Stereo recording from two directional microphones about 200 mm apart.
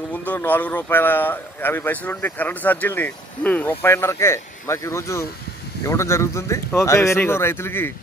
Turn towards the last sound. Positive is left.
turn(degrees=10)  # may be behind; listen again after turning